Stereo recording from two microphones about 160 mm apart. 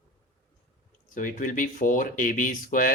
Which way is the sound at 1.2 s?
55° left (ahead or behind).